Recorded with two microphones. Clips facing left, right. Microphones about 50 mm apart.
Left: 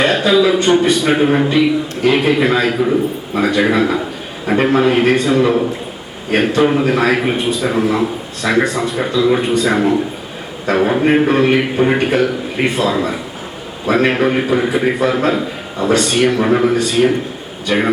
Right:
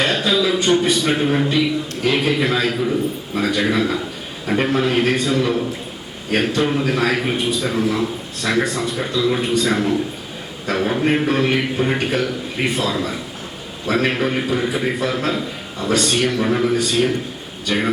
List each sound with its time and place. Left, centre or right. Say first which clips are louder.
0.0 s a man's voice: left 6 dB; centre
16.7 s a man's voice: left 5 dB; centre